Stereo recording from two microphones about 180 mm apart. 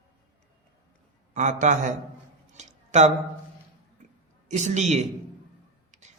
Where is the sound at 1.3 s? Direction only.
45° right (ahead or behind).